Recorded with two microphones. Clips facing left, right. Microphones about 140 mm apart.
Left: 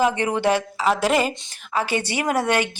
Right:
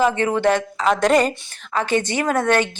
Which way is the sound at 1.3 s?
20° left (ahead or behind).